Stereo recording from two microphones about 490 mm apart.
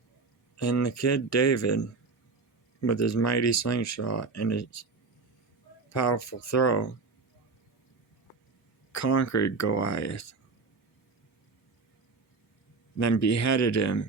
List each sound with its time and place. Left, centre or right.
0.5 s speech: left
5.9 s speech: left
8.9 s speech: left
13.0 s speech: left